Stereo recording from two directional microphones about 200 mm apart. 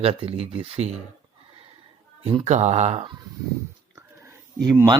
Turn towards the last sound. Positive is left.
turn(degrees=-20)  # may be behind; listen again after turning